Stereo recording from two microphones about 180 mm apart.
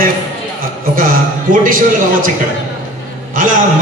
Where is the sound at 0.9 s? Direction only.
50° right (ahead or behind).